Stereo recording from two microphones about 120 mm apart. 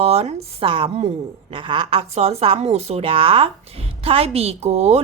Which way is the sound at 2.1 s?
60° right (ahead or behind).